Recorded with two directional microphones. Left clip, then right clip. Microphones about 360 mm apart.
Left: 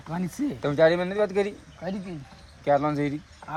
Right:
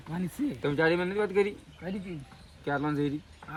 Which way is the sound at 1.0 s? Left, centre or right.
Centre.